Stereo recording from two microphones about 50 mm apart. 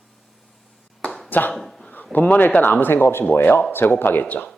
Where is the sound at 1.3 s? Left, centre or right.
Left.